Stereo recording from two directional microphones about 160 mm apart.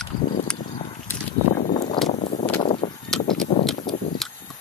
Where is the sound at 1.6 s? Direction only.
50° left (ahead or behind).